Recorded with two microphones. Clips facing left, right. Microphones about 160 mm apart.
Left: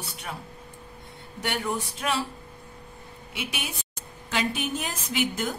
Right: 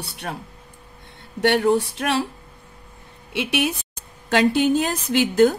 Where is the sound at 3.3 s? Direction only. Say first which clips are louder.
Right 12 dB; 80° right.